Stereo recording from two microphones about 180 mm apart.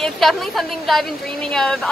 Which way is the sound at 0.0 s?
Centre (ahead or behind).